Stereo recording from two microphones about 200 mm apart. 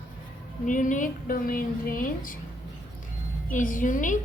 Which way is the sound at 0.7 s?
40° left (ahead or behind).